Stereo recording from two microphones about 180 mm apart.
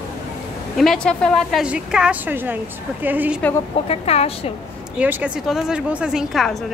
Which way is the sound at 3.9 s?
35° left (ahead or behind).